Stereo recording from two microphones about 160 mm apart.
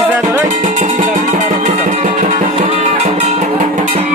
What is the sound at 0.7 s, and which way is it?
Music, 50° right (ahead or behind).